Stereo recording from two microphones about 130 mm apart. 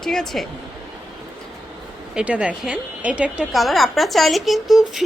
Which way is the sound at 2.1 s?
10° right (ahead or behind).